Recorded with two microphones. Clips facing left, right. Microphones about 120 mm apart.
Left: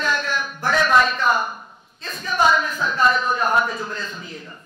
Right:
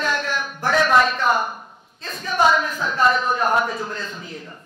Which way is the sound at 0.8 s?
50° right (ahead or behind).